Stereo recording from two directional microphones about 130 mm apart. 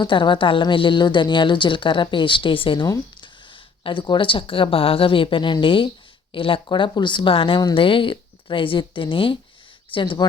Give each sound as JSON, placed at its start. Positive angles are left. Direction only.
{"t": 0.0, "sound": "a woman's voice", "side_deg": 40}
{"t": 2.8, "sound": "speech", "side_deg": 30}
{"t": 3.5, "sound": "a woman's voice", "side_deg": 40}